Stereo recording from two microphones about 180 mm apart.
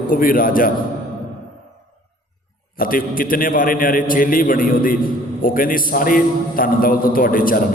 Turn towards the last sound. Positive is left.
turn(degrees=50)  # may be behind; listen again after turning